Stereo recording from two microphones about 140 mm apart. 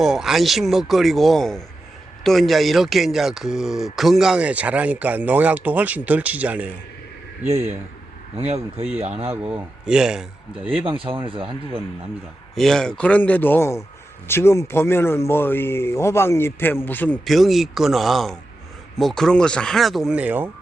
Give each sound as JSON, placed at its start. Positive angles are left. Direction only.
{"t": 0.0, "sound": "speech", "side_deg": -5}
{"t": 8.4, "sound": "speech", "side_deg": -50}
{"t": 9.3, "sound": "speech", "side_deg": -15}
{"t": 10.8, "sound": "speech", "side_deg": -40}
{"t": 12.5, "sound": "speech", "side_deg": 5}
{"t": 17.2, "sound": "speech", "side_deg": 0}